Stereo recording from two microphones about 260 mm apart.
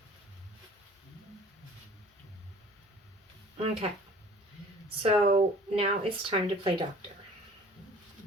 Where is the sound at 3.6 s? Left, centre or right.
Right.